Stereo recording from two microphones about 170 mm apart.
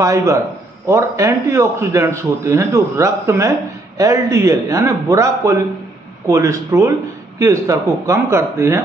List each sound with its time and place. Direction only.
0.0 s a man's voice: 20° right (ahead or behind)